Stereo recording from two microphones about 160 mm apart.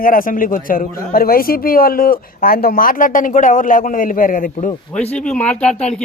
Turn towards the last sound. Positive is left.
turn(degrees=5)  # may be behind; listen again after turning